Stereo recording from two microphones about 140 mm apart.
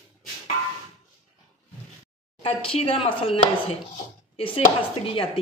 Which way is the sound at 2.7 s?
45° left (ahead or behind).